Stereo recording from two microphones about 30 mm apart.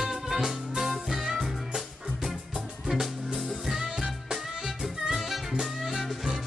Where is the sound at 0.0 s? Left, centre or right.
Centre.